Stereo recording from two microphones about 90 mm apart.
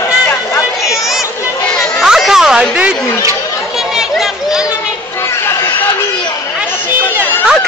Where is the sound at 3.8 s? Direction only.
5° right (ahead or behind).